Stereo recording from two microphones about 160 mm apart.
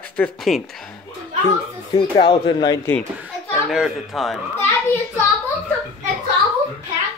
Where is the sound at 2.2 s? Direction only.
30° left (ahead or behind).